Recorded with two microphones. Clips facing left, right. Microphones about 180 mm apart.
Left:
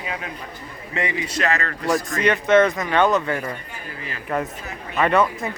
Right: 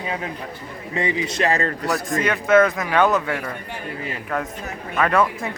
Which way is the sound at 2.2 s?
5° right (ahead or behind).